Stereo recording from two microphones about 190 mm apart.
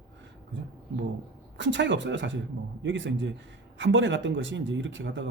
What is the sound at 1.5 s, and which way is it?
Speech, 70° right (ahead or behind).